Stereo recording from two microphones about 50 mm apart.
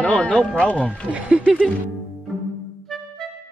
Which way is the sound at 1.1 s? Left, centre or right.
Right.